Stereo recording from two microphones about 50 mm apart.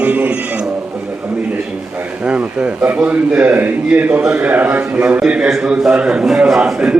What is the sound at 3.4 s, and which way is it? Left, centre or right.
Speech, right.